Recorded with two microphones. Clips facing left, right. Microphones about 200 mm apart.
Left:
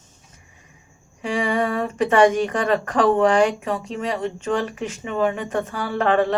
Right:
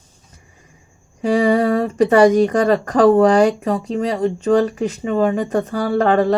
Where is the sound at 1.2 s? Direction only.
40° right (ahead or behind).